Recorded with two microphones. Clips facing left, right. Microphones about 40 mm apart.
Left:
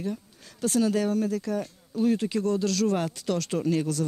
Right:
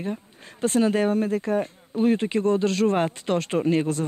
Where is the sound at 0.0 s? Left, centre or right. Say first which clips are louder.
Right 2 dB; right.